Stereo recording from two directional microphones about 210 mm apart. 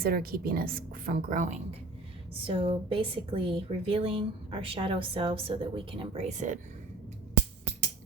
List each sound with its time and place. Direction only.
0.0 s a woman's voice: 45° right (ahead or behind)
2.5 s speech: 25° right (ahead or behind)